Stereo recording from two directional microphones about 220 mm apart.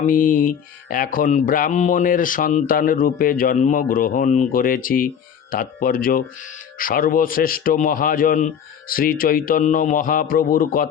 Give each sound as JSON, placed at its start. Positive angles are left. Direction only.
{"t": 0.0, "sound": "mantra", "side_deg": 40}